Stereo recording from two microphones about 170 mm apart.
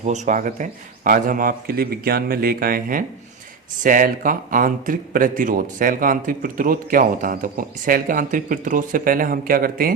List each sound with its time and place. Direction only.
0.0 s speech: 45° right (ahead or behind)